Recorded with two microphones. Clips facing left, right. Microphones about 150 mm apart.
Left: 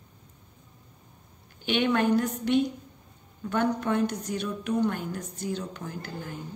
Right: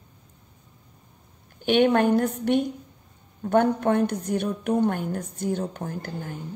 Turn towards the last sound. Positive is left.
turn(degrees=-50)  # may be behind; listen again after turning